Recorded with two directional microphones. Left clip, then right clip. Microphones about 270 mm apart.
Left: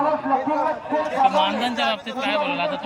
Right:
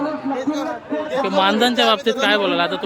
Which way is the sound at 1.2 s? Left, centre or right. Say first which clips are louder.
Right 3 dB; centre.